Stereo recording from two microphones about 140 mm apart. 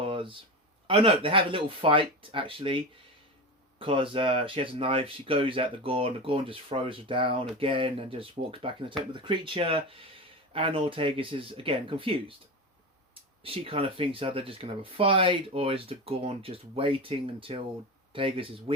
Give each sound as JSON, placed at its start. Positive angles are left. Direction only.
{"t": 0.0, "sound": "a sound", "side_deg": -40}
{"t": 0.9, "sound": "speech", "side_deg": -40}
{"t": 13.4, "sound": "speech", "side_deg": -40}